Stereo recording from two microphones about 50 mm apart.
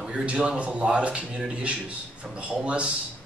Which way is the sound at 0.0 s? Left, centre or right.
Right.